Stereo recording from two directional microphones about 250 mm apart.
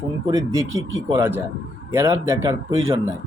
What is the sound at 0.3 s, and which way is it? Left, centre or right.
Speech, centre.